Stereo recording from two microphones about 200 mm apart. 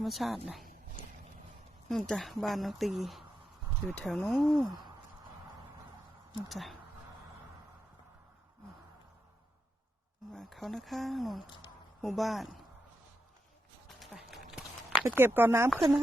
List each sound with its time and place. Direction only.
0.0 s speech: centre (ahead or behind)
1.9 s speech: centre (ahead or behind)
4.6 s a sound: 20° right (ahead or behind)
6.5 s speech: centre (ahead or behind)
10.3 s speech: centre (ahead or behind)
11.4 s a woman's voice: 25° left (ahead or behind)
12.0 s speech: centre (ahead or behind)
13.8 s a sound: centre (ahead or behind)